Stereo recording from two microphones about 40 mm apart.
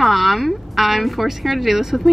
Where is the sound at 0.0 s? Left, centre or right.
Centre.